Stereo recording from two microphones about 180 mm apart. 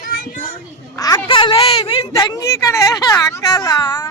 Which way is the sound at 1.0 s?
20° left (ahead or behind).